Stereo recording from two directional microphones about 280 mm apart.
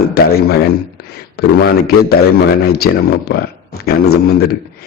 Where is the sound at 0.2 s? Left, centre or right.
Left.